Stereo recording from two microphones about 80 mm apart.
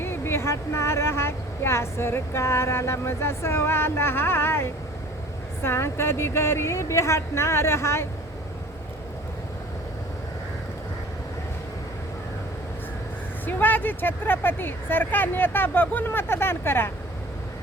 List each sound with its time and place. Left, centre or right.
0.0 s a woman's voice: left
13.4 s speech: left